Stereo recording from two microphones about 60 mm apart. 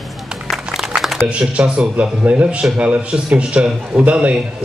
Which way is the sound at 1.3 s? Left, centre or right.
Centre.